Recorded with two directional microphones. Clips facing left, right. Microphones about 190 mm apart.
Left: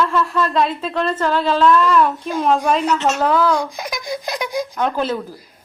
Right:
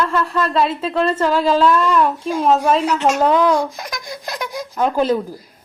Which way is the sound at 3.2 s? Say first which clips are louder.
Right 1 dB; 20° right (ahead or behind).